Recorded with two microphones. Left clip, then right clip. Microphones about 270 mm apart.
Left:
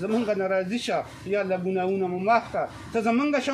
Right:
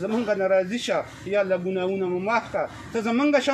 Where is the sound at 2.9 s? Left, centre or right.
Centre.